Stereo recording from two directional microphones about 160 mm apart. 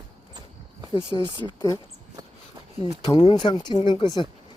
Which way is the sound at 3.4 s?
25° left (ahead or behind).